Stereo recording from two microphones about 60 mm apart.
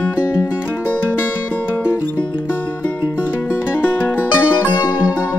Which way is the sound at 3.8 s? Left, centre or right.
Left.